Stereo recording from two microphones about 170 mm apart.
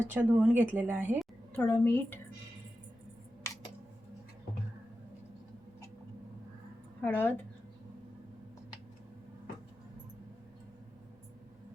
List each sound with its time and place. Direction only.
0.0 s a woman's voice: 10° right (ahead or behind)
1.2 s a woman's voice: 10° left (ahead or behind)
3.4 s computer keyboard: 20° left (ahead or behind)
7.0 s speech: 10° left (ahead or behind)